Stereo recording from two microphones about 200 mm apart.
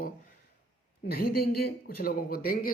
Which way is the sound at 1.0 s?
50° left (ahead or behind).